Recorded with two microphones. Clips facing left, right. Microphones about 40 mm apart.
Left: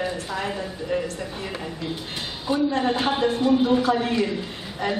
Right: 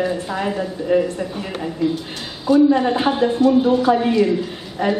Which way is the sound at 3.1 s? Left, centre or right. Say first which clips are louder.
Right 5 dB; centre.